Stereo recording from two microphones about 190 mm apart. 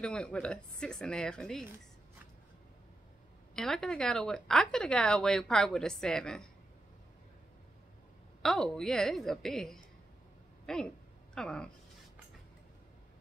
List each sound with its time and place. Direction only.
0.0 s speech: 5° left (ahead or behind)
3.5 s speech: centre (ahead or behind)
8.4 s speech: centre (ahead or behind)